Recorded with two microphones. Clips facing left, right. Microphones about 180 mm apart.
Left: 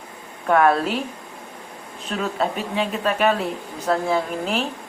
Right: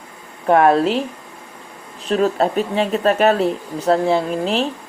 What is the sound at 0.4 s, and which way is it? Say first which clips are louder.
Speech: right 4 dB; 35° right (ahead or behind).